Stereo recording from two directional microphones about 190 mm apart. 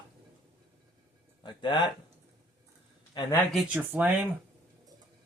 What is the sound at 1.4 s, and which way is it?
Speech, 25° left (ahead or behind).